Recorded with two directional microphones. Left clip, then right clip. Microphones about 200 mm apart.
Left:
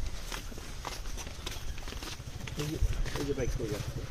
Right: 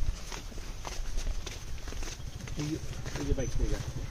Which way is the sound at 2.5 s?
40° left (ahead or behind).